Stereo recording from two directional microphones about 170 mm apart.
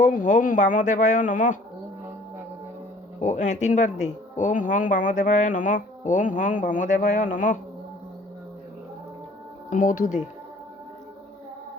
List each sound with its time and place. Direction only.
0.0 s speech: 50° left (ahead or behind)
3.2 s speech: 45° left (ahead or behind)
9.6 s speech: 50° left (ahead or behind)